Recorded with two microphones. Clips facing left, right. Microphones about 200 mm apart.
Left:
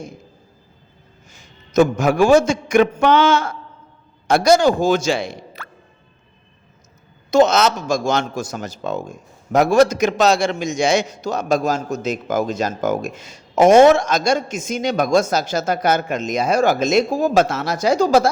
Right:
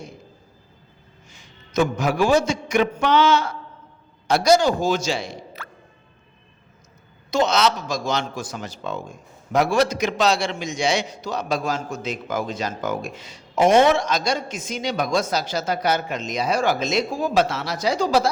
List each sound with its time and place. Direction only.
1.3 s a man's voice: 45° left (ahead or behind)
7.3 s a man's voice: 45° left (ahead or behind)